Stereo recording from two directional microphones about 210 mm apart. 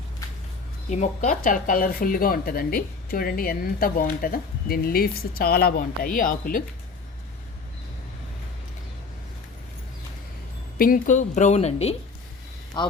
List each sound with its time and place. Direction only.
0.9 s speech: 35° left (ahead or behind)
10.8 s a woman's voice: 40° left (ahead or behind); by 12.9 s 20° left (ahead or behind)